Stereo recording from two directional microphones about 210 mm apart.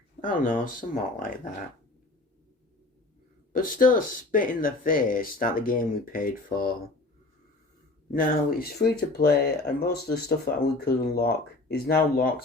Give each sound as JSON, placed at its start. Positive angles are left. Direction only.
{"t": 0.3, "sound": "speech", "side_deg": 40}
{"t": 3.5, "sound": "speech", "side_deg": 40}
{"t": 8.1, "sound": "speech", "side_deg": 45}